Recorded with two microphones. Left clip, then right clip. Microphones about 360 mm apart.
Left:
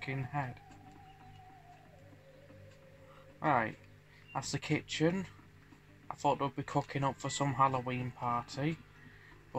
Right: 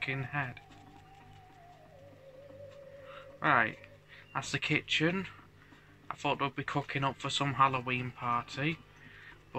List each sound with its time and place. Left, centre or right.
0.0 s speech: centre
3.3 s speech: centre